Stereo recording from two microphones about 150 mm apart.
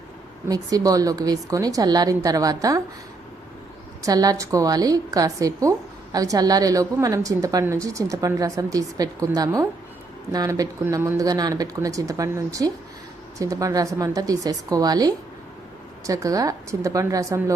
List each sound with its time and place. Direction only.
0.4 s a woman's voice: 25° right (ahead or behind)
4.0 s a woman's voice: 25° right (ahead or behind)